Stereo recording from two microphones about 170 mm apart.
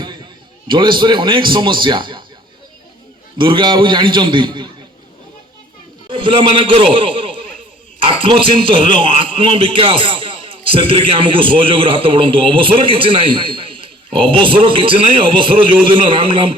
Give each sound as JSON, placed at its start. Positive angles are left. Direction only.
{"t": 0.7, "sound": "a man's voice", "side_deg": -30}
{"t": 3.3, "sound": "a man's voice", "side_deg": -30}
{"t": 6.1, "sound": "a man's voice", "side_deg": -30}